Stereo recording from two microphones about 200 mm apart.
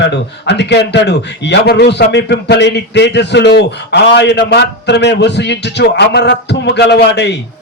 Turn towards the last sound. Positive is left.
turn(degrees=60)  # may be behind; listen again after turning